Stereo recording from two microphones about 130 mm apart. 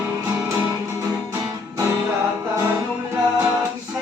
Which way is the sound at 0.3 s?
20° right (ahead or behind).